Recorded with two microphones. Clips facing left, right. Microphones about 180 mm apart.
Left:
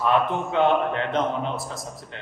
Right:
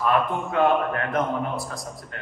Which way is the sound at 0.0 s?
25° left (ahead or behind).